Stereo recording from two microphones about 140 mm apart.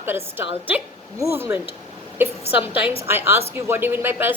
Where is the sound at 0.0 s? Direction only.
15° right (ahead or behind).